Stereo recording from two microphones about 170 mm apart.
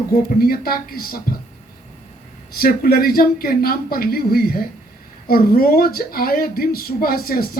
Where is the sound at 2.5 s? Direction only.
60° left (ahead or behind).